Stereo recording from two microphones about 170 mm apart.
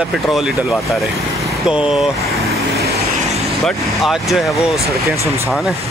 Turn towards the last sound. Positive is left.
turn(degrees=0)  # may be behind; listen again after turning